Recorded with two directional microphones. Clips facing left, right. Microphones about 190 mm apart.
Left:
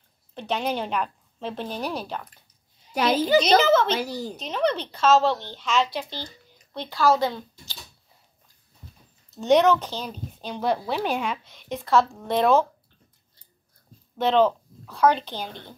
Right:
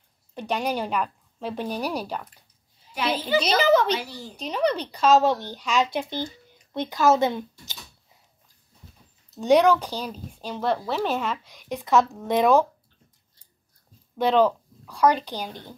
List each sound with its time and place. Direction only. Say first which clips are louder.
0.3 s a woman's voice: even; 10° right (ahead or behind)
2.9 s a child's voice: left 4 dB; 40° left (ahead or behind)
4.5 s a woman's voice: right 1 dB; 10° right (ahead or behind)
9.4 s a woman's voice: even; 10° right (ahead or behind)
11.5 s a woman's voice: even; 15° right (ahead or behind)
14.1 s a woman's voice: even; 10° right (ahead or behind)